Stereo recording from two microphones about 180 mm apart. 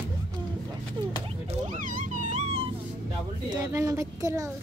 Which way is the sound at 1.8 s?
45° right (ahead or behind).